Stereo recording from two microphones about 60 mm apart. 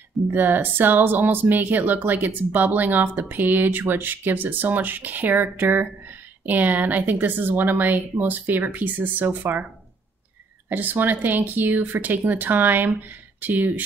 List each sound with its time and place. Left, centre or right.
0.3 s speech: right
10.7 s speech: right